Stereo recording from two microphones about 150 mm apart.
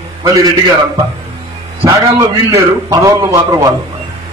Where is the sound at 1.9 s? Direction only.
20° right (ahead or behind).